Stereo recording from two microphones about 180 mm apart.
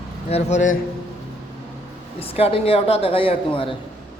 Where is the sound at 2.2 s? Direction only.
30° left (ahead or behind).